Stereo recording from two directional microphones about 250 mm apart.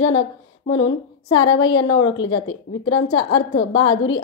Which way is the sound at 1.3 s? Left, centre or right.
Left.